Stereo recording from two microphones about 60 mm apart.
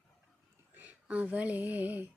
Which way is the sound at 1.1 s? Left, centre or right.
Right.